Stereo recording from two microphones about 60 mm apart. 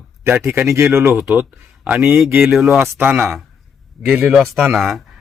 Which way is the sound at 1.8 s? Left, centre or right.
Right.